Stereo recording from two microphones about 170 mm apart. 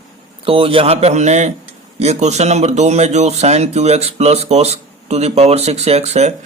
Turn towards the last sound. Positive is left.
turn(degrees=-40)  # may be behind; listen again after turning